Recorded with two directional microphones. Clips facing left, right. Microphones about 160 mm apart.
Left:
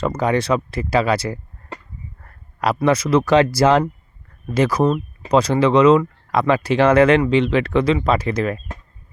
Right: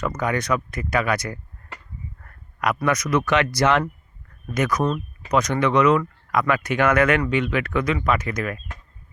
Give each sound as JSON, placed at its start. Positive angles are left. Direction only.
{"t": 0.0, "sound": "speech", "side_deg": 30}